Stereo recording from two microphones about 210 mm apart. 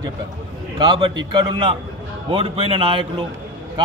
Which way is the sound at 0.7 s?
20° right (ahead or behind).